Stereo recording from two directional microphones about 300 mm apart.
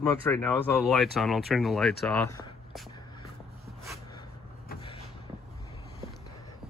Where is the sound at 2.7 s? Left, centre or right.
Centre.